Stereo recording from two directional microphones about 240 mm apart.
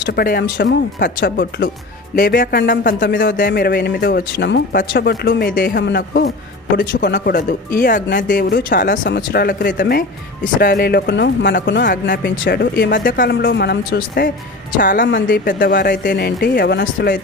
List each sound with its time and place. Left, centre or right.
0.0 s speech: left
2.1 s speech: left
3.0 s speech: left